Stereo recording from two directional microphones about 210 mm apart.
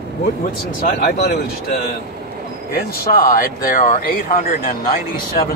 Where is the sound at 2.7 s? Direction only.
45° left (ahead or behind).